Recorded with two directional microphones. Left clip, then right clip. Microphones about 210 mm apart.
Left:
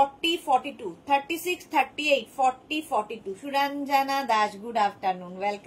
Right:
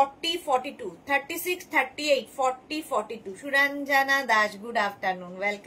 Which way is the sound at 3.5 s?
20° right (ahead or behind).